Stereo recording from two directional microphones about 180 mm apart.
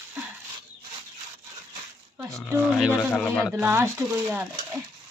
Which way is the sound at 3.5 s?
15° right (ahead or behind).